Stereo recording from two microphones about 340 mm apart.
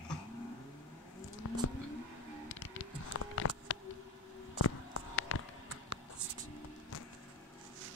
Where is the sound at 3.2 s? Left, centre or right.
Left.